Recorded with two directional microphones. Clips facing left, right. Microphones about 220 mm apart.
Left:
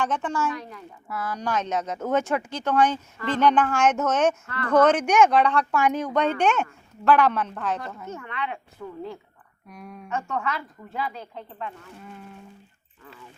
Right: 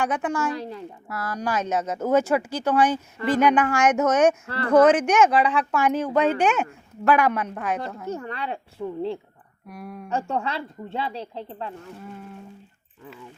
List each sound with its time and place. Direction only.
0.0 s a woman's voice: 10° right (ahead or behind)
0.5 s a woman's voice: 30° right (ahead or behind)
1.0 s a woman's voice: 10° right (ahead or behind)
4.4 s a woman's voice: 30° right (ahead or behind)
4.7 s a woman's voice: 5° right (ahead or behind)
8.0 s a woman's voice: 35° right (ahead or behind)
9.6 s speech: 5° right (ahead or behind)
10.1 s a woman's voice: 30° right (ahead or behind)